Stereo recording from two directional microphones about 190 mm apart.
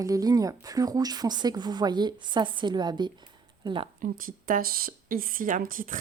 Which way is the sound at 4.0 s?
45° right (ahead or behind).